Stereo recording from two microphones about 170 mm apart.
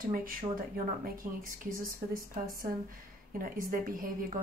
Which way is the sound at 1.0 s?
55° right (ahead or behind).